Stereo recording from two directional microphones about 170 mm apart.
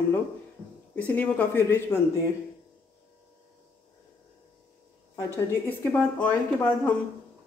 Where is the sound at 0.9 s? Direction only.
10° left (ahead or behind).